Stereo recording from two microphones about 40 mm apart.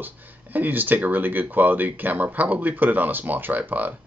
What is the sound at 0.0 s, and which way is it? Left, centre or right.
Speech, right.